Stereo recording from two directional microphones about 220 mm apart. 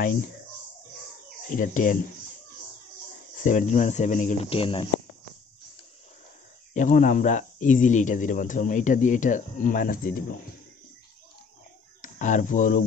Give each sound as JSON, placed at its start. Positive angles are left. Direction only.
{"t": 1.5, "sound": "speech", "side_deg": 35}
{"t": 3.4, "sound": "speech", "side_deg": 35}
{"t": 6.7, "sound": "speech", "side_deg": 35}
{"t": 12.0, "sound": "speech", "side_deg": 35}